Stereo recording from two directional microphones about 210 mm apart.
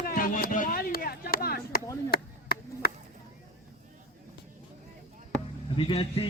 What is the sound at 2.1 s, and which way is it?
Chop, 45° left (ahead or behind).